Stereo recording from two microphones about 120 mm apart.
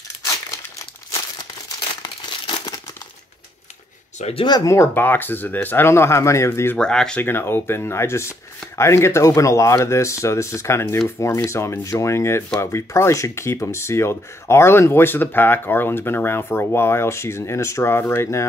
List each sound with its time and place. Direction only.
2.0 s crumpling: 45° left (ahead or behind)
4.2 s speech: 55° left (ahead or behind)
4.5 s speech: 30° left (ahead or behind)
6.8 s speech: 5° left (ahead or behind)
7.2 s speech: 20° left (ahead or behind)